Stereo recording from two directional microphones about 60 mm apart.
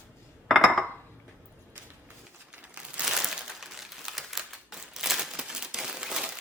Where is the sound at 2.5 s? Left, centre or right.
Right.